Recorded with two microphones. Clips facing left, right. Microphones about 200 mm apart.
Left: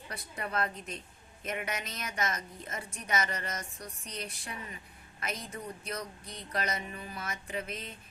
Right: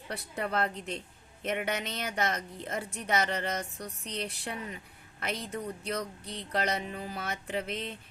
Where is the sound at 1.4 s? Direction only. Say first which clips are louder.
Right 5 dB; 65° right (ahead or behind).